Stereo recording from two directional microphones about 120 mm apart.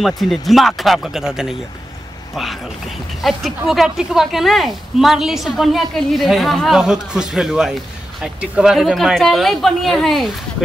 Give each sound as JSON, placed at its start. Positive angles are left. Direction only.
{"t": 0.0, "sound": "speech", "side_deg": 0}